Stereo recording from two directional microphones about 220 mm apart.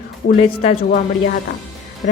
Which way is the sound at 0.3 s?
35° left (ahead or behind).